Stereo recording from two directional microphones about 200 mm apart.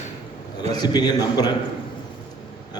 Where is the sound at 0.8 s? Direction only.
20° left (ahead or behind).